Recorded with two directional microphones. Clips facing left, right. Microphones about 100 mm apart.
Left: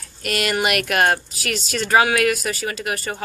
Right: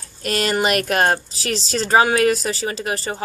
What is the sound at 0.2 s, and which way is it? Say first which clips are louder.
A woman's voice: right 2 dB; 35° right (ahead or behind).